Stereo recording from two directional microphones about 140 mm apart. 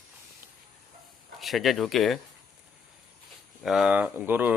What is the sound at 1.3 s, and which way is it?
Speech, centre (ahead or behind).